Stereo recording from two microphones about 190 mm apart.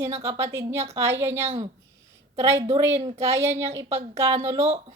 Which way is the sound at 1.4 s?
35° right (ahead or behind).